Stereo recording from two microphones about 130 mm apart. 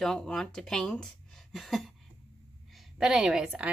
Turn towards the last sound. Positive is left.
turn(degrees=-10)  # may be behind; listen again after turning